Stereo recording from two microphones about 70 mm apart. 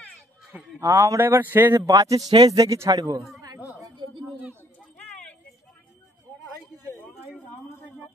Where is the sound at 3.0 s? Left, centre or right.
Right.